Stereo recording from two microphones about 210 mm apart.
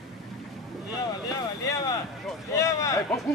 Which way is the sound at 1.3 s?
15° left (ahead or behind).